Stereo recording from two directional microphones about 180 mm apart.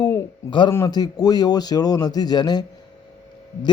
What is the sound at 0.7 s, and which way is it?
A man's voice, 20° left (ahead or behind).